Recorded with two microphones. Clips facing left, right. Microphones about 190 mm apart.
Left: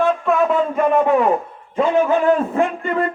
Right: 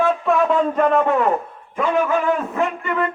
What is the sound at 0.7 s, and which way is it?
Speech, 15° left (ahead or behind).